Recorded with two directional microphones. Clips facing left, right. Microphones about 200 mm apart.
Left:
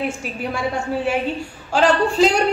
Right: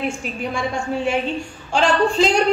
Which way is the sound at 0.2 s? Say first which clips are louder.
Even; 5° left (ahead or behind).